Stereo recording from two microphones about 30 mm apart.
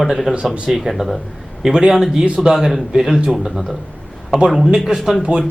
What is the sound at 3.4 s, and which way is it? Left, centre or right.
Speech, centre.